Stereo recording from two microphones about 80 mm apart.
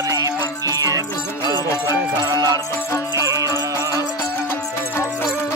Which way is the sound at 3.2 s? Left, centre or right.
Right.